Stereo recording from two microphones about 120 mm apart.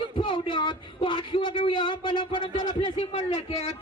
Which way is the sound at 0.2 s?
45° left (ahead or behind).